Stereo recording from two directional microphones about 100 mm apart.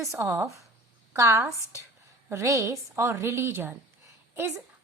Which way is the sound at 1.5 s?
30° left (ahead or behind).